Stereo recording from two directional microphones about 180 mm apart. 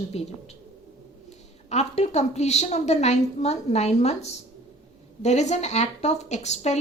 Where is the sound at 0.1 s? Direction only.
35° left (ahead or behind).